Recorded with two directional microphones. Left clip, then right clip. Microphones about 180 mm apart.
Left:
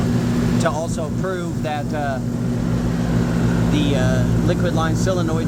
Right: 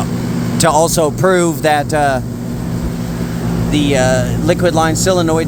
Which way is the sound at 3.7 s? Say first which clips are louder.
Right 11 dB; 35° right (ahead or behind).